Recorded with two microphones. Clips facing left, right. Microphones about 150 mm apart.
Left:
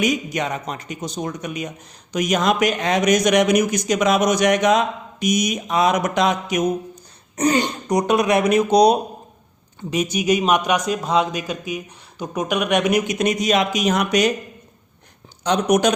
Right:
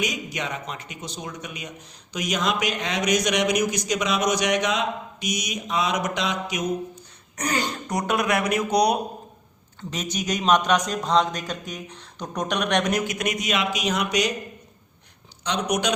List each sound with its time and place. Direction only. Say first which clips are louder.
0.0 s a man's voice: left 7 dB; 50° left (ahead or behind)
7.3 s speech: left 8 dB; 25° left (ahead or behind)
9.9 s speech: left 9 dB; 10° left (ahead or behind)
13.1 s a man's voice: left 7 dB; 30° left (ahead or behind); by 14.3 s 50° left (ahead or behind)
15.4 s a man's voice: left 7 dB; 45° left (ahead or behind)